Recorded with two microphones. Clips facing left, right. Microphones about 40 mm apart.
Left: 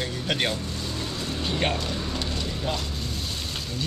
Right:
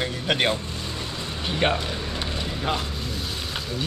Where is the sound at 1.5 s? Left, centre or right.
Centre.